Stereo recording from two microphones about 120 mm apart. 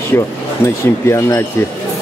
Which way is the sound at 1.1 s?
25° left (ahead or behind).